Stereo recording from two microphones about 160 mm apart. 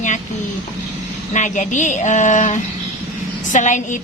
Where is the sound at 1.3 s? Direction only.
50° left (ahead or behind).